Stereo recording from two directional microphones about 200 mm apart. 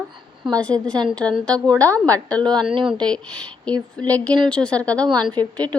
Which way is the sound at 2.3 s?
5° left (ahead or behind).